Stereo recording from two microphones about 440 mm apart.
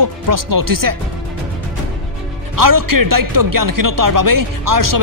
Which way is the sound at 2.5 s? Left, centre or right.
Right.